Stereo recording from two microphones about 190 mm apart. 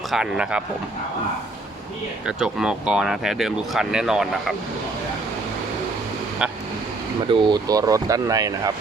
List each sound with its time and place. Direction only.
0.1 s speech: 5° right (ahead or behind)
2.2 s speech: 5° right (ahead or behind)
6.4 s speech: 5° right (ahead or behind)
7.3 s speech: 25° right (ahead or behind)